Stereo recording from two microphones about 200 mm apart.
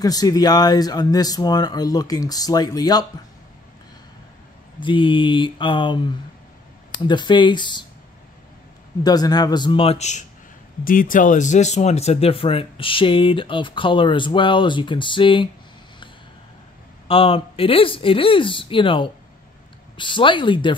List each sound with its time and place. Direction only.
0.0 s speech: 20° left (ahead or behind)
4.7 s speech: 25° left (ahead or behind)
9.0 s speech: 20° left (ahead or behind)
17.1 s speech: 30° left (ahead or behind)